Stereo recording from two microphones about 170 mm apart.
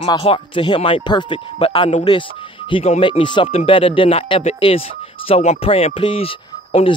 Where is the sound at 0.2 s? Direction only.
30° left (ahead or behind).